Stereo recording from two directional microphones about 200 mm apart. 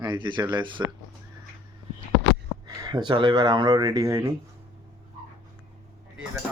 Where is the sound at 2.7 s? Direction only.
20° right (ahead or behind).